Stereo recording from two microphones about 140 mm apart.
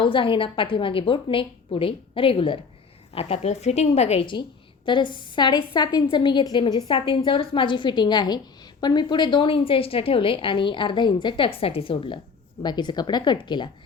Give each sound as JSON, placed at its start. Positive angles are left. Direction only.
{"t": 0.0, "sound": "a woman's voice", "side_deg": 35}
{"t": 4.9, "sound": "a woman's voice", "side_deg": 35}